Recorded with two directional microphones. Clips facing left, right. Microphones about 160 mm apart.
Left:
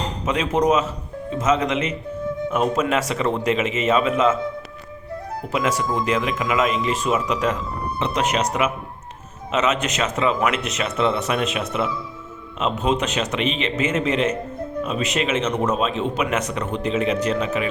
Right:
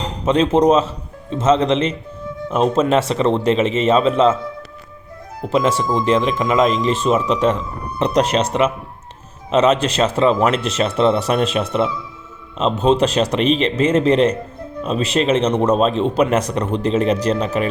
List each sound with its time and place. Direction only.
0.3 s speech: 30° right (ahead or behind)
5.5 s speech: 30° right (ahead or behind)